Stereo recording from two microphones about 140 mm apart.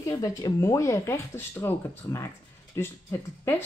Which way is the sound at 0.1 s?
25° left (ahead or behind).